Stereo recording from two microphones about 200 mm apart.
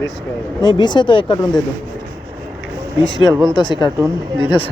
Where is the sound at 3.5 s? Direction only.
25° left (ahead or behind).